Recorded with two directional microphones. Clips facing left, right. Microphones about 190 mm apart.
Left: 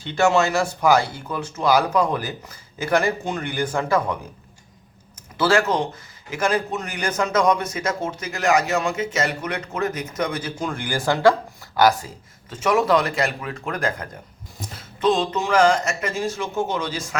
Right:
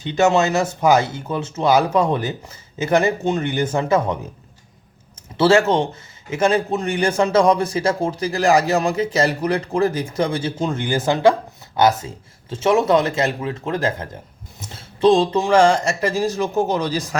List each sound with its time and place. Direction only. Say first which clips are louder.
0.0 s speech: right 2 dB; 20° right (ahead or behind)
5.4 s a man's voice: right 5 dB; 25° right (ahead or behind)